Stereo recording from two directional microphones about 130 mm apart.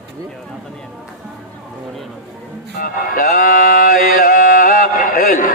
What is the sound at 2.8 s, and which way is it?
Music, 90° left.